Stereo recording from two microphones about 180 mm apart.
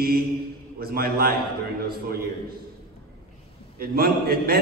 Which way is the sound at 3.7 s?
55° right (ahead or behind).